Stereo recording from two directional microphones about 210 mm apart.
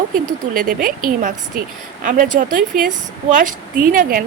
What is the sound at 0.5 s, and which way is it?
Speech, 40° right (ahead or behind).